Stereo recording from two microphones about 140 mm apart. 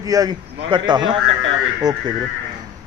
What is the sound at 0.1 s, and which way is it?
A man's voice, 30° right (ahead or behind).